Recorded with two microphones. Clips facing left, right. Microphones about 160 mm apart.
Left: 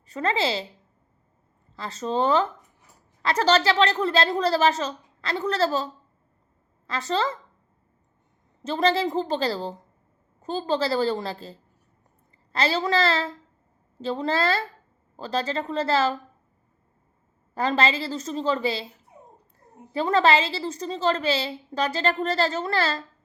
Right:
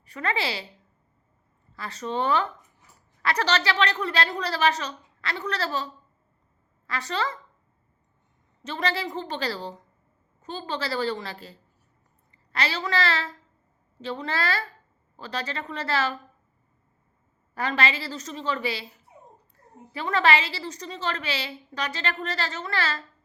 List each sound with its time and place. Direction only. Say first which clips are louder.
0.0 s a woman's voice: left 4 dB; 25° left (ahead or behind)
1.7 s a woman's voice: left 3 dB; 25° left (ahead or behind)
8.6 s a woman's voice: left 6 dB; 30° left (ahead or behind)
12.5 s a woman's voice: left 4 dB; 30° left (ahead or behind)
17.5 s a woman's voice: left 4 dB; 25° left (ahead or behind)
19.9 s a woman's voice: left 3 dB; 30° left (ahead or behind)